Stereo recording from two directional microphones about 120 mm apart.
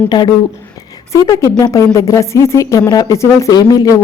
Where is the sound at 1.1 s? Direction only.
25° left (ahead or behind).